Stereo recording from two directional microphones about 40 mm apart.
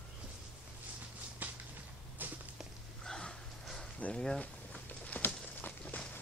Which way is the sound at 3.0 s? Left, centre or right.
Centre.